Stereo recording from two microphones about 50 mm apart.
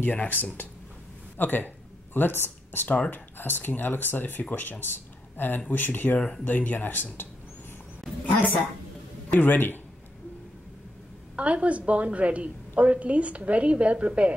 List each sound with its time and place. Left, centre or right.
0.0 s speech: left
9.4 s speech: left
11.3 s a woman's voice: right